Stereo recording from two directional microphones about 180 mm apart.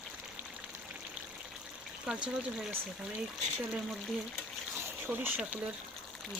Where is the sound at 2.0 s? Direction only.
5° right (ahead or behind).